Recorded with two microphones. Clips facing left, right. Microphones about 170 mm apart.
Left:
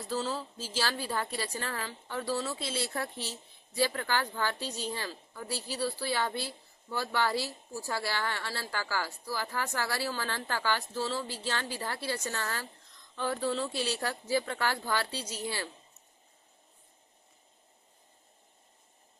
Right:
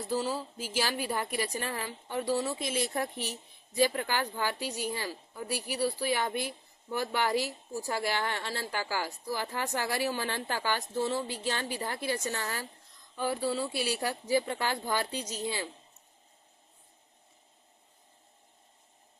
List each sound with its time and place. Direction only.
0.1 s a woman's voice: 15° right (ahead or behind)